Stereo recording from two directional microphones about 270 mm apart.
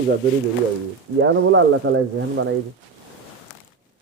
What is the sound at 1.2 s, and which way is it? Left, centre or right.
Speech, right.